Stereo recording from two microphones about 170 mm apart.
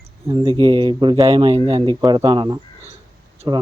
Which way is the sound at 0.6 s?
30° right (ahead or behind).